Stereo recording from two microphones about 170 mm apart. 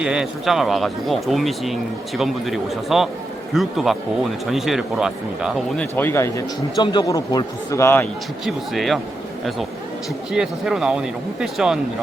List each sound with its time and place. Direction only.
0.0 s speech: 5° right (ahead or behind)
6.0 s a man's voice: 15° left (ahead or behind)
8.4 s speech: centre (ahead or behind)
10.3 s speech: 5° right (ahead or behind)